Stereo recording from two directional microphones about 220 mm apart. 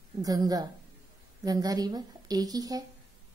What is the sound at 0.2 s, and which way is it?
A woman's voice, 15° right (ahead or behind).